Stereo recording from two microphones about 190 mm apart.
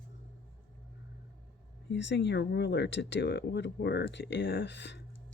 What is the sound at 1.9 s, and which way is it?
Speech, 70° left (ahead or behind).